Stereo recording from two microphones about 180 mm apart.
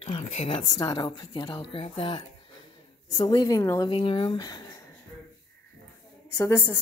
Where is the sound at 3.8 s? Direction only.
30° left (ahead or behind).